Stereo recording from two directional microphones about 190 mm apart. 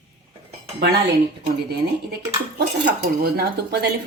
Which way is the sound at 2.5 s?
55° right (ahead or behind).